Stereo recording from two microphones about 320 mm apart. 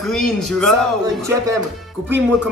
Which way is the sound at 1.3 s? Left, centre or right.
Centre.